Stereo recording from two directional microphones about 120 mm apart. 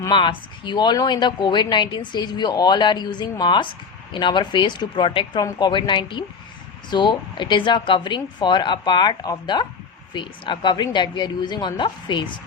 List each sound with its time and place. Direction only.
0.1 s speech: 40° left (ahead or behind)